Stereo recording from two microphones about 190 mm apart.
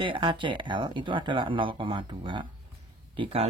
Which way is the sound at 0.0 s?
25° right (ahead or behind).